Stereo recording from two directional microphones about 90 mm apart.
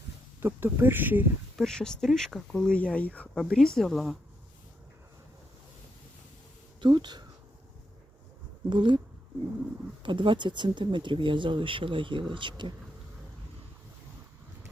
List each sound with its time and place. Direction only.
0.3 s speech: 25° right (ahead or behind)
1.5 s speech: 5° left (ahead or behind)
6.8 s speech: 55° right (ahead or behind)
8.7 s speech: 65° right (ahead or behind)
10.0 s speech: 65° right (ahead or behind)